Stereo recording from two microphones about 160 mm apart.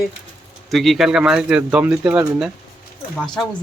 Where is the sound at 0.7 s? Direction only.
Centre (ahead or behind).